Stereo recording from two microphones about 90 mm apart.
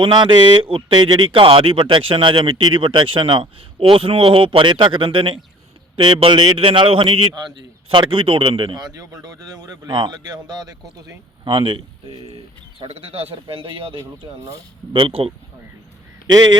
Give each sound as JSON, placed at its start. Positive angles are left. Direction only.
{"t": 0.0, "sound": "a man's voice", "side_deg": -60}
{"t": 11.4, "sound": "speech", "side_deg": -65}
{"t": 12.8, "sound": "speech", "side_deg": -90}
{"t": 14.0, "sound": "speech", "side_deg": -40}
{"t": 14.9, "sound": "speech", "side_deg": -90}
{"t": 16.2, "sound": "speech", "side_deg": -45}